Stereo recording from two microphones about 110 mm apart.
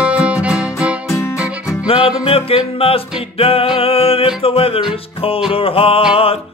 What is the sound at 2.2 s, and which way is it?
Music, 60° left (ahead or behind).